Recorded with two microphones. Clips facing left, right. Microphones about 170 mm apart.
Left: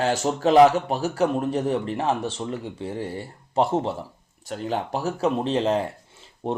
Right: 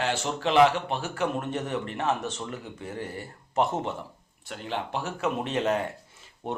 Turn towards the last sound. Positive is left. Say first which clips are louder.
# left 6 dB
turn(degrees=30)  # may be behind; listen again after turning